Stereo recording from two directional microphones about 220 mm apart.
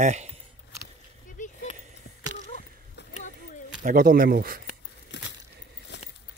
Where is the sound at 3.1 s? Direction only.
35° left (ahead or behind).